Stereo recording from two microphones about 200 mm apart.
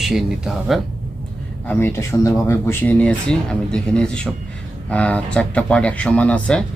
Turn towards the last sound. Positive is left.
turn(degrees=5)  # may be behind; listen again after turning